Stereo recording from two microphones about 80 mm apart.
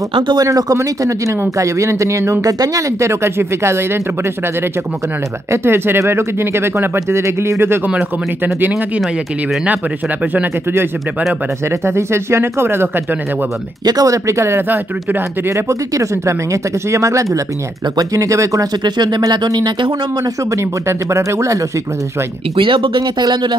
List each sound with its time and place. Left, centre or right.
0.5 s speech: right
0.7 s speech: right
5.5 s speech: right
10.3 s speech: right
13.8 s speech: right
14.7 s speech: right
15.5 s speech: right
18.9 s speech: right
20.5 s speech: right
22.6 s speech: right